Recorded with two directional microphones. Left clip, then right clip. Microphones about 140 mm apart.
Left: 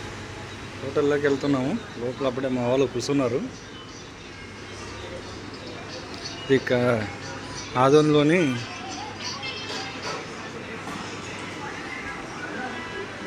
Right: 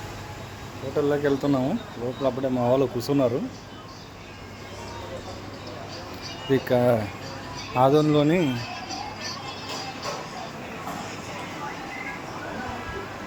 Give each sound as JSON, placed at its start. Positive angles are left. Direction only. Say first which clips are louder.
{"t": 0.9, "sound": "speech", "louder": "left 1 dB", "side_deg": -15}
{"t": 6.5, "sound": "speech", "louder": "even", "side_deg": -15}